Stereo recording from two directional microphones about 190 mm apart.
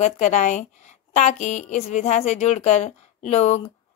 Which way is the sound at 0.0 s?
40° left (ahead or behind).